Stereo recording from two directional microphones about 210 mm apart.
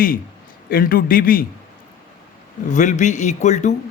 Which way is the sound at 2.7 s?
35° left (ahead or behind).